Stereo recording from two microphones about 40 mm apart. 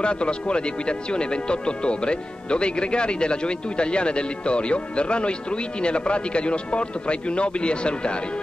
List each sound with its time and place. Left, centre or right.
0.0 s speech: left